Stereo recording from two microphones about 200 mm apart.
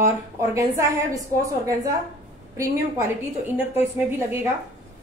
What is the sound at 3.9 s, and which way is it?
Speech, 15° right (ahead or behind).